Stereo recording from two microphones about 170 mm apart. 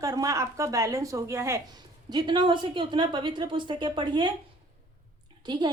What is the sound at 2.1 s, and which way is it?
A woman's voice, 25° right (ahead or behind).